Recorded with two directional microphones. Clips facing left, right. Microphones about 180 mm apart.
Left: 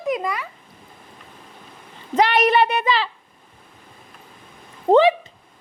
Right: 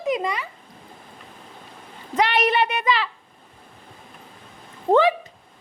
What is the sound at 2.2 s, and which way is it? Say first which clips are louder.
Speech: left 3 dB; 45° left (ahead or behind).